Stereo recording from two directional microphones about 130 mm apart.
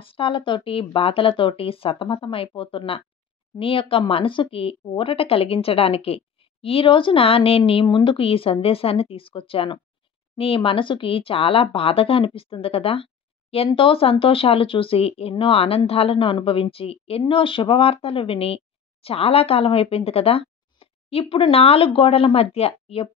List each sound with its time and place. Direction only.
0.0 s speech: 45° left (ahead or behind)